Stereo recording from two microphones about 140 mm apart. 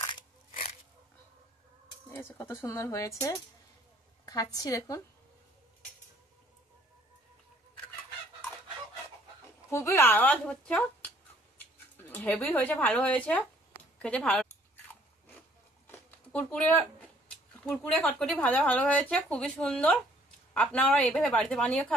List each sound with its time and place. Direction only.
2.0 s speech: 15° left (ahead or behind)
9.7 s speech: 20° left (ahead or behind)
15.9 s a sound: 10° left (ahead or behind)
17.6 s speech: 10° left (ahead or behind)